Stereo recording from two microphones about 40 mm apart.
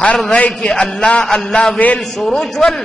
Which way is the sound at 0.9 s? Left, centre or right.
Left.